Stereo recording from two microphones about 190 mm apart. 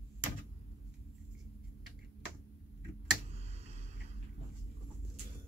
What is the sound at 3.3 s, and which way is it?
Tick, 35° right (ahead or behind).